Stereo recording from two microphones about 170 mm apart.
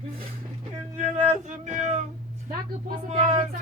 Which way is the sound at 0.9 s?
45° right (ahead or behind).